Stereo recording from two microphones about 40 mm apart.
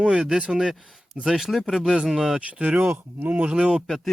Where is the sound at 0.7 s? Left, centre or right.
Centre.